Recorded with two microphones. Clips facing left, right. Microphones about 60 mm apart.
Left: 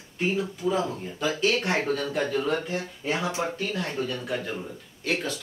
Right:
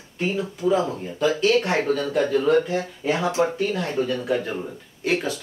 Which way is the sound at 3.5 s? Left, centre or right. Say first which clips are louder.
Right 6 dB; centre.